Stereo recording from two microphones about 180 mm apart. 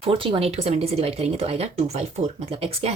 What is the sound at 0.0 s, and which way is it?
A woman's voice, 30° right (ahead or behind).